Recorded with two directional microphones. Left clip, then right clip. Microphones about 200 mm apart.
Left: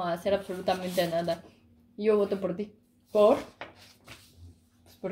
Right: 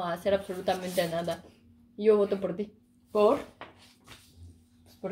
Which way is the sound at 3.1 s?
20° left (ahead or behind).